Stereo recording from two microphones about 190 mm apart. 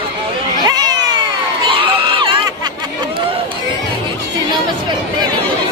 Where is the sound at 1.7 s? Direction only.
25° right (ahead or behind).